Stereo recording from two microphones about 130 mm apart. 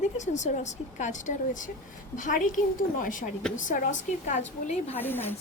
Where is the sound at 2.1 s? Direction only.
90° left.